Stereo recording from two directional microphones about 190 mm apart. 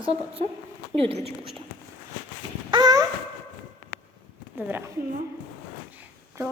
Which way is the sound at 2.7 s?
20° right (ahead or behind).